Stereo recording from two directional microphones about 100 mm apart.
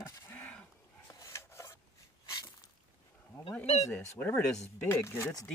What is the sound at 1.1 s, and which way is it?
Rub, 30° left (ahead or behind).